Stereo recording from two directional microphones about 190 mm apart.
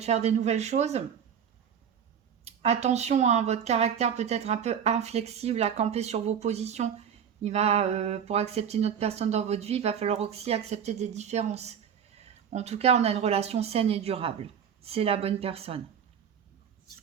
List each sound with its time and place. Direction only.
0.0 s speech: 35° right (ahead or behind)
2.4 s speech: 35° right (ahead or behind)